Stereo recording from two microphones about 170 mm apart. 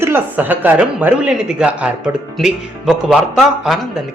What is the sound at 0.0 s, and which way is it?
Speech, 10° right (ahead or behind).